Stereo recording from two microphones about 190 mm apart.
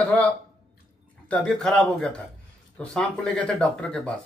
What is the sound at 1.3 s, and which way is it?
A man's voice, 5° left (ahead or behind).